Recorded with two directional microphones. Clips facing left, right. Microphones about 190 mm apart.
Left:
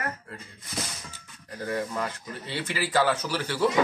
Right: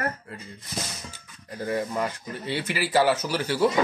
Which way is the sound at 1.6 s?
15° right (ahead or behind).